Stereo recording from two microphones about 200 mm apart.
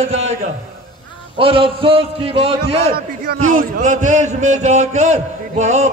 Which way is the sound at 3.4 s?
40° right (ahead or behind).